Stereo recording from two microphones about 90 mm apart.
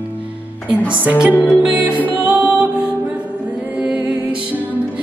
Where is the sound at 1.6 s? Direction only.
15° right (ahead or behind).